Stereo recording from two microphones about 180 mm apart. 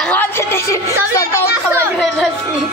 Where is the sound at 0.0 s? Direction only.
10° left (ahead or behind).